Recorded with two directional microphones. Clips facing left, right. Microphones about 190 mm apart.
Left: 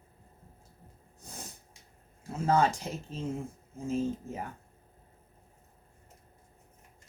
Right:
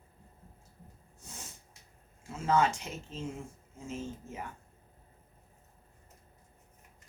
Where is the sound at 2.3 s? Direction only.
35° left (ahead or behind).